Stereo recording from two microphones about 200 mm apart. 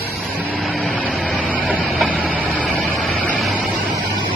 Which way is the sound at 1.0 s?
5° right (ahead or behind).